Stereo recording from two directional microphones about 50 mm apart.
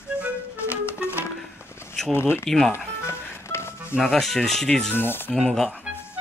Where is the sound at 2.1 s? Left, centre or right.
Left.